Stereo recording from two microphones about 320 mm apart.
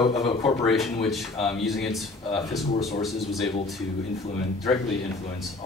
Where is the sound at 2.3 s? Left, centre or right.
Centre.